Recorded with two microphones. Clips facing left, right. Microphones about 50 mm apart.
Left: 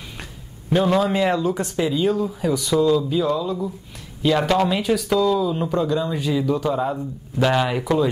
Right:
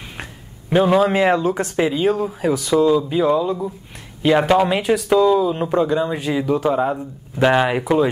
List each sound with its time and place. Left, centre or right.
0.2 s a sound: right
1.0 s speech: right
2.6 s speech: centre
3.1 s speech: right